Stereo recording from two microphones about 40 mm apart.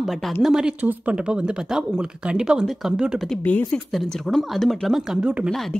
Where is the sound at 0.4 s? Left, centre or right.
Centre.